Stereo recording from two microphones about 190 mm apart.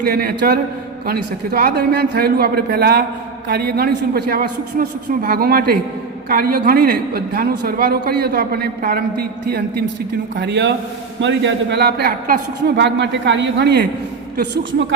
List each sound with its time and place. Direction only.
0.0 s a man's voice: 55° right (ahead or behind); by 14.9 s 70° right (ahead or behind)